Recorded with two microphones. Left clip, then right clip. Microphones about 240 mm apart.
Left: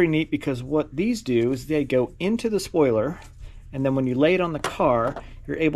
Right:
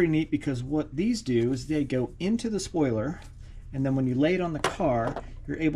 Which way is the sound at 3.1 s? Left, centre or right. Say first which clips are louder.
Left 3 dB; centre.